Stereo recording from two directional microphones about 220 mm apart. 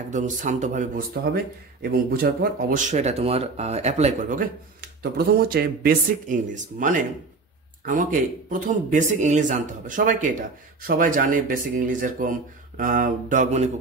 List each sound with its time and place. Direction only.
0.1 s speech: 35° right (ahead or behind)
5.1 s speech: 45° right (ahead or behind)